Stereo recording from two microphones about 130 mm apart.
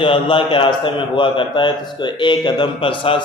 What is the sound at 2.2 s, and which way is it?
Speech, 40° left (ahead or behind).